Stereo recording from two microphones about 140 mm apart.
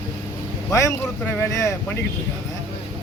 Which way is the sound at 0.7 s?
20° left (ahead or behind).